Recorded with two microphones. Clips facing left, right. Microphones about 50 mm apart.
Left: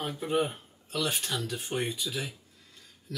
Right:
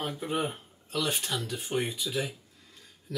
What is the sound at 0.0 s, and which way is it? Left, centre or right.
Speech, centre.